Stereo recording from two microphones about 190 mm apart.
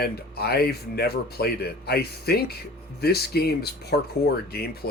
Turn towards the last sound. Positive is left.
turn(degrees=55)  # may be behind; listen again after turning